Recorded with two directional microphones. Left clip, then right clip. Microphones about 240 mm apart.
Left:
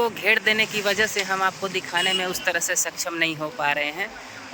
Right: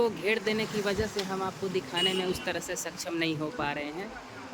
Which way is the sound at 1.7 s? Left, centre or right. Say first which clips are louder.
Left 3 dB; centre.